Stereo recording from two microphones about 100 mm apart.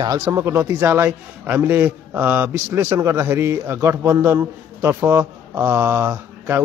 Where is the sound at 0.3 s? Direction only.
25° right (ahead or behind).